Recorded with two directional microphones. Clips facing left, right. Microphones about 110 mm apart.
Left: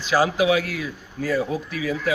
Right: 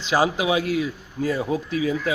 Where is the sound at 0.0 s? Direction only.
20° right (ahead or behind).